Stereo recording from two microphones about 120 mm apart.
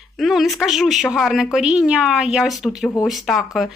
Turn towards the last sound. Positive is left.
turn(degrees=0)  # may be behind; listen again after turning